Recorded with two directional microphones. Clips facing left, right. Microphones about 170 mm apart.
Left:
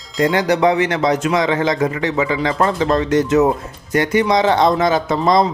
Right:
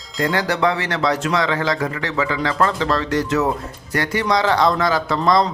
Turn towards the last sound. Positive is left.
turn(degrees=20)  # may be behind; listen again after turning